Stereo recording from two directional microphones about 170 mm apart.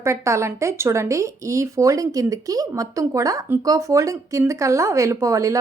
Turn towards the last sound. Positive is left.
turn(degrees=-20)  # may be behind; listen again after turning